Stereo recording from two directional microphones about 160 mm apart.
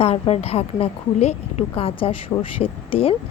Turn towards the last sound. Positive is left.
turn(degrees=35)  # may be behind; listen again after turning